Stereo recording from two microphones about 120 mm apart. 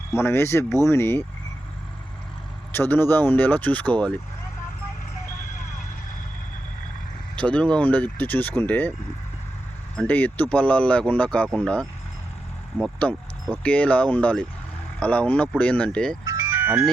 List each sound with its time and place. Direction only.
0.1 s speech: 20° left (ahead or behind)
2.7 s speech: 15° left (ahead or behind)
7.3 s speech: 10° left (ahead or behind)
10.0 s speech: 15° left (ahead or behind)
16.2 s music: 25° right (ahead or behind)
16.5 s music: 15° right (ahead or behind)